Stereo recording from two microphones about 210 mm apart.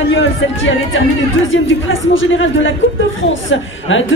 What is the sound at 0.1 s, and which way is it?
A woman's voice, 65° left (ahead or behind).